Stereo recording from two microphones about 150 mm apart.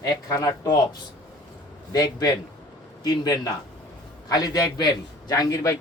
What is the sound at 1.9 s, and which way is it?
A man's voice, 25° left (ahead or behind).